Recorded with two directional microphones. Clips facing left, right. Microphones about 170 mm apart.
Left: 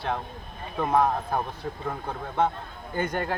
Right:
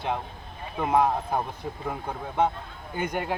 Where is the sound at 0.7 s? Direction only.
15° right (ahead or behind).